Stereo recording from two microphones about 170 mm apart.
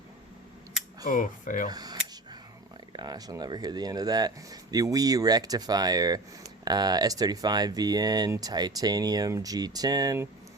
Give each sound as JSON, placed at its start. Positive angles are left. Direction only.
{"t": 1.0, "sound": "speech", "side_deg": 55}
{"t": 1.7, "sound": "speech", "side_deg": -20}